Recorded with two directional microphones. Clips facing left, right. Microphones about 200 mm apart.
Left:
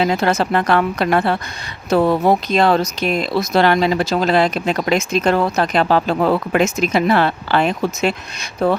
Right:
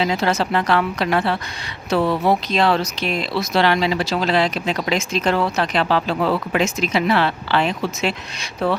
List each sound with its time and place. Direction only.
0.0 s speech: 50° left (ahead or behind)